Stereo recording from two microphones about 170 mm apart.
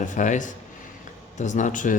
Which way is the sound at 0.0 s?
50° left (ahead or behind).